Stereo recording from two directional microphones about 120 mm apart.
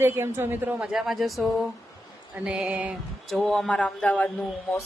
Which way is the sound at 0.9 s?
Centre (ahead or behind).